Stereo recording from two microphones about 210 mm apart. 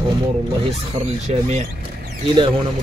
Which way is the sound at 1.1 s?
30° right (ahead or behind).